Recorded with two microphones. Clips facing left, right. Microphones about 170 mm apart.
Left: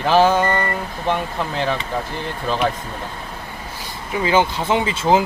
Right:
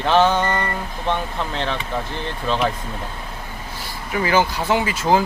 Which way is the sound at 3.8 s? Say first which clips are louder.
Even; 20° left (ahead or behind).